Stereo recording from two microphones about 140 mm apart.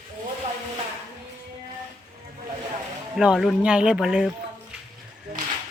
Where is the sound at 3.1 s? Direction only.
5° right (ahead or behind).